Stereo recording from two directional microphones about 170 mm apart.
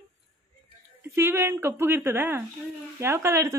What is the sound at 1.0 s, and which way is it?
Speech, 15° right (ahead or behind).